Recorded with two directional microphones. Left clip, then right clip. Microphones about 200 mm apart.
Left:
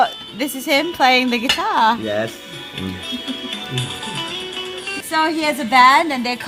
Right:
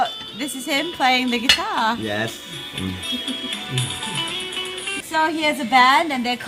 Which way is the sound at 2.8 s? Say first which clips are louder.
Right 1 dB; 5° left (ahead or behind).